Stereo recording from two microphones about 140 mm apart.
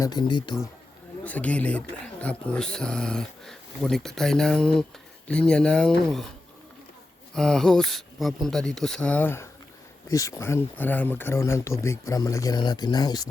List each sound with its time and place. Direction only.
0.0 s speech: 30° left (ahead or behind)
1.2 s speech: 10° left (ahead or behind)
7.3 s speech: 5° left (ahead or behind); by 13.2 s 30° left (ahead or behind)